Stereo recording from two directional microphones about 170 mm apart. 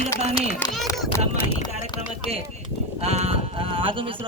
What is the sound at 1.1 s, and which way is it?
Speech, 15° left (ahead or behind).